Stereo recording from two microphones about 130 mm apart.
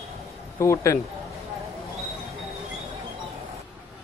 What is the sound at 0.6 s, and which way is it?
Speech, 20° left (ahead or behind).